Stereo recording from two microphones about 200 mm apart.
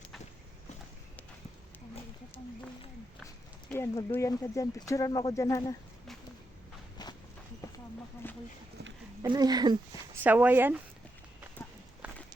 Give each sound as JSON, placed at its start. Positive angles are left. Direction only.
{"t": 3.7, "sound": "speech", "side_deg": 10}
{"t": 7.0, "sound": "walk", "side_deg": 20}
{"t": 7.6, "sound": "a sound", "side_deg": 20}
{"t": 9.3, "sound": "speech", "side_deg": -20}
{"t": 10.2, "sound": "speech", "side_deg": -10}
{"t": 12.0, "sound": "walk", "side_deg": -5}